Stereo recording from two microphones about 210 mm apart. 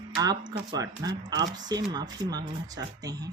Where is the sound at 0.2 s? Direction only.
20° right (ahead or behind).